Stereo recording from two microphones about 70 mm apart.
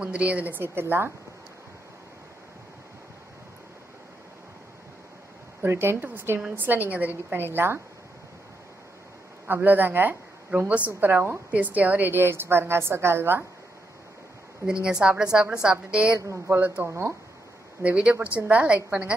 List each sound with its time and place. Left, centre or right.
0.0 s a woman's voice: centre; by 1.1 s right
5.6 s a woman's voice: right
9.5 s a woman's voice: right
14.7 s a woman's voice: centre
16.8 s a woman's voice: right
17.8 s a woman's voice: centre